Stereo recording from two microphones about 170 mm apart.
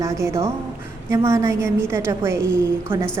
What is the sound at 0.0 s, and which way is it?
A woman's voice, 15° right (ahead or behind).